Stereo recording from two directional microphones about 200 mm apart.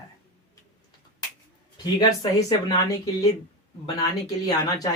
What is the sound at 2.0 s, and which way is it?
Speech, 20° left (ahead or behind).